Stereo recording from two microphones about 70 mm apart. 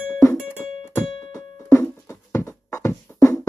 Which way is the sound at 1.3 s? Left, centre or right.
Left.